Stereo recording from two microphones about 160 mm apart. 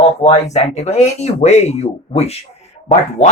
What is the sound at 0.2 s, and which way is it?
Speech, 40° left (ahead or behind).